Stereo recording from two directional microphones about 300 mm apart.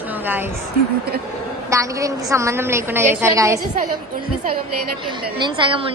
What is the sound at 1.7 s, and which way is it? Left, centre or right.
A woman's voice, centre.